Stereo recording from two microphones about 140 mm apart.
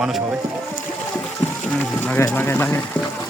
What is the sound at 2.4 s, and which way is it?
Speech, 15° left (ahead or behind).